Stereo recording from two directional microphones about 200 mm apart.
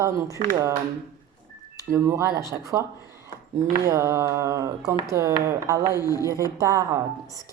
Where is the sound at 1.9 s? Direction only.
15° right (ahead or behind).